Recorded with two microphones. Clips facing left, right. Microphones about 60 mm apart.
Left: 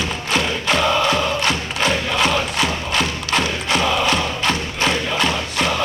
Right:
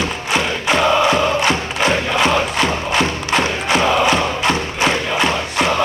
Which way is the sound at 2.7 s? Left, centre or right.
Centre.